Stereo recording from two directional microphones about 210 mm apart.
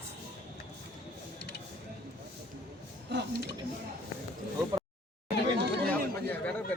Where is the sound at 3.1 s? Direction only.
55° right (ahead or behind).